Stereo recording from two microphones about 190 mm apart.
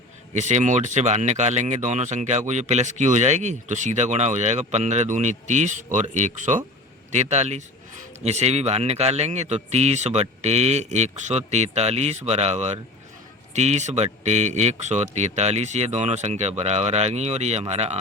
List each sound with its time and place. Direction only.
0.3 s speech: 40° right (ahead or behind)